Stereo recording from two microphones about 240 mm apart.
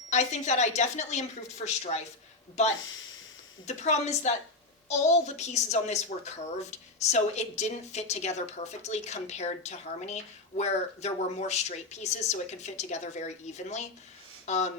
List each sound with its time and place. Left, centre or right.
0.1 s a woman's voice: left